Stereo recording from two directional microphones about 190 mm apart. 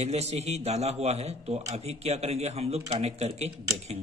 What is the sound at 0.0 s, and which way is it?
A man's voice, 35° right (ahead or behind).